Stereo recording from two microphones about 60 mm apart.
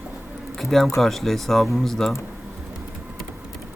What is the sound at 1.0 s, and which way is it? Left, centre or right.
Speech, centre.